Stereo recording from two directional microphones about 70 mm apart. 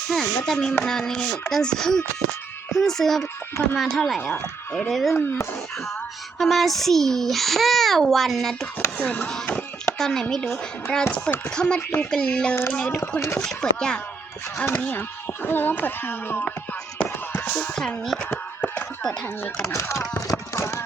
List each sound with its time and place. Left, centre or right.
0.1 s a child's voice: centre
4.3 s speech: centre
4.9 s a child's voice: centre
6.4 s a child's voice: centre
9.0 s speech: centre
10.0 s speech: centre
13.0 s speech: left
13.4 s speech: centre
14.6 s speech: left
17.0 s chop: left
17.7 s speech: centre
18.2 s a sound: left
19.6 s speech: left
20.5 s clip-clop: left